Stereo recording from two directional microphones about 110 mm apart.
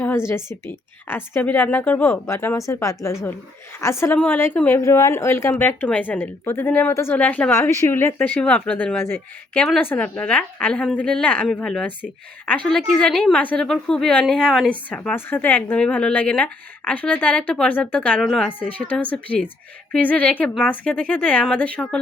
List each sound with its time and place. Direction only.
0.3 s a woman's voice: 25° left (ahead or behind)
4.8 s a woman's voice: 25° left (ahead or behind)
7.6 s a woman's voice: 25° left (ahead or behind)
18.2 s speech: centre (ahead or behind)
18.9 s a woman's voice: 15° left (ahead or behind)